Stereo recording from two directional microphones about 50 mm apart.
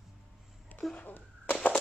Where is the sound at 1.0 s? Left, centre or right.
Left.